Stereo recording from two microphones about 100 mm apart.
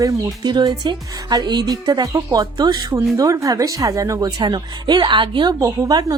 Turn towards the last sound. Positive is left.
turn(degrees=-35)  # may be behind; listen again after turning